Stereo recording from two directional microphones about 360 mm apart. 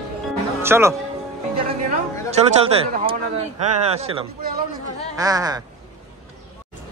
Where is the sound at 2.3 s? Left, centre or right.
Centre.